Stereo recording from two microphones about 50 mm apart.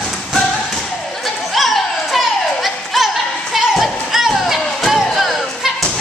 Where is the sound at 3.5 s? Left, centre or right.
Centre.